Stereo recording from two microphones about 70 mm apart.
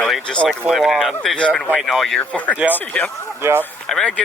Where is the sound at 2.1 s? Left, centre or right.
Centre.